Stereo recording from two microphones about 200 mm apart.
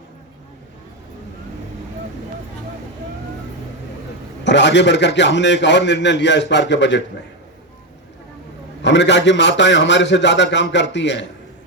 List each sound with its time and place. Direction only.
4.4 s a man's voice: 60° left (ahead or behind)
8.8 s a man's voice: 60° left (ahead or behind)